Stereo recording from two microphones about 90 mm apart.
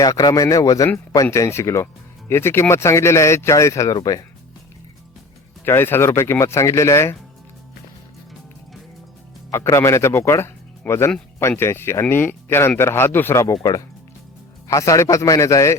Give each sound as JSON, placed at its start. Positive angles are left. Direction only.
{"t": 0.0, "sound": "speech", "side_deg": 45}
{"t": 5.6, "sound": "speech", "side_deg": 25}
{"t": 9.5, "sound": "speech", "side_deg": 30}
{"t": 13.4, "sound": "speech", "side_deg": 45}